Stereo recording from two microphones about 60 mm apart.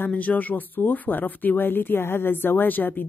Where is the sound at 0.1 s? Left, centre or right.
Left.